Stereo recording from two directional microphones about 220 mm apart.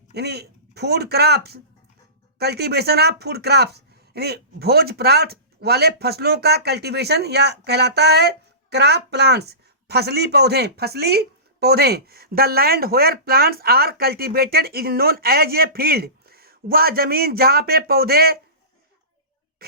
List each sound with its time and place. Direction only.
0.1 s speech: 50° right (ahead or behind)